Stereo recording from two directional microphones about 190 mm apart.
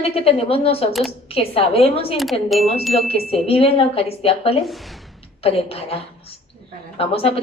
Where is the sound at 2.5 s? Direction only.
Centre (ahead or behind).